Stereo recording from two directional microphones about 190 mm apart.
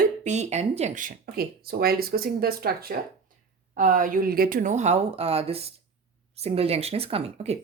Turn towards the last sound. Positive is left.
turn(degrees=-30)  # may be behind; listen again after turning